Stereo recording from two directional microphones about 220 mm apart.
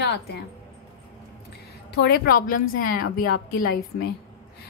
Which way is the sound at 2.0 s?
40° left (ahead or behind).